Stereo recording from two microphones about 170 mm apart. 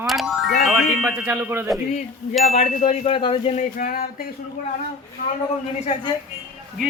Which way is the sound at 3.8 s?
55° left (ahead or behind).